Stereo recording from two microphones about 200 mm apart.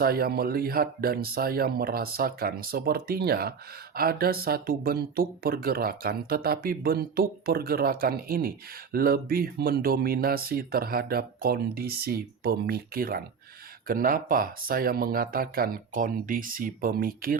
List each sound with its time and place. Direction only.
0.0 s speech: 50° right (ahead or behind)